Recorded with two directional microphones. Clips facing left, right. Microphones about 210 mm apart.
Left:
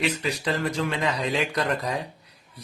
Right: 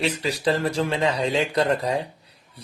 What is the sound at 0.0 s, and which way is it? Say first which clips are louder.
Speech: right 3 dB; 35° right (ahead or behind).